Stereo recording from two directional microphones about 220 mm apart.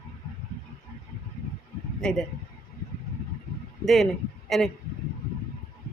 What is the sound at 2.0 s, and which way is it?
Speech, 5° left (ahead or behind).